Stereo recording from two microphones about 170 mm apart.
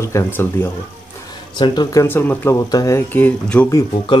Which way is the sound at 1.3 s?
25° left (ahead or behind).